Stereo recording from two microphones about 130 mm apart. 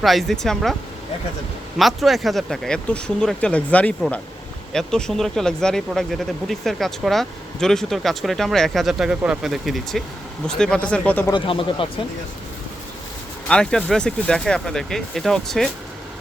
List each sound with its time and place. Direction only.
0.0 s speech: centre (ahead or behind)
1.8 s speech: centre (ahead or behind)
11.3 s speech: 40° left (ahead or behind)
13.5 s speech: 5° left (ahead or behind)